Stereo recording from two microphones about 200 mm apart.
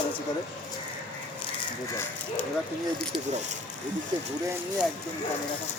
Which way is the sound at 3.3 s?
35° right (ahead or behind).